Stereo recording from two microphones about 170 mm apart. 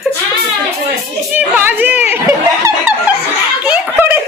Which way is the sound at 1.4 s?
10° right (ahead or behind).